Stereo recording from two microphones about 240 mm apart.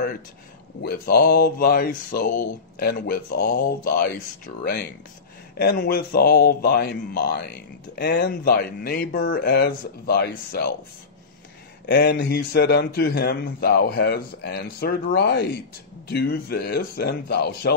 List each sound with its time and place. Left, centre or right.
0.8 s speech: left
11.8 s speech: left